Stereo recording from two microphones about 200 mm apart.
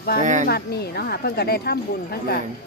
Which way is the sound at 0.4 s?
50° left (ahead or behind).